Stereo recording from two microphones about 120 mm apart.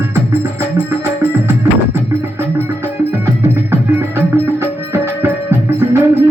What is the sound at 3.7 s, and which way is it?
Music, 20° right (ahead or behind).